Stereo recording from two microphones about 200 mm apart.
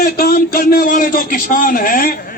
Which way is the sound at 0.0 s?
50° left (ahead or behind).